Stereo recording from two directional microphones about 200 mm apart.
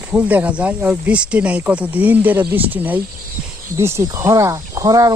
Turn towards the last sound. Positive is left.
turn(degrees=-15)  # may be behind; listen again after turning